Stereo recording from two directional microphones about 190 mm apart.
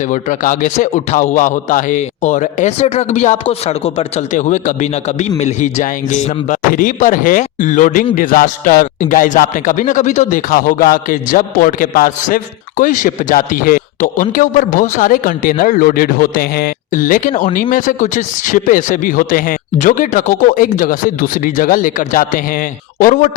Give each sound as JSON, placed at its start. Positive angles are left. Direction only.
{"t": 0.1, "sound": "a man's voice", "side_deg": 45}